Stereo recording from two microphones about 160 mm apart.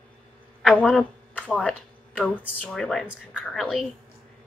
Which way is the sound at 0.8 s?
5° left (ahead or behind).